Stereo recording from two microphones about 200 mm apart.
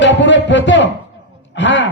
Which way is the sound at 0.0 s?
60° left (ahead or behind).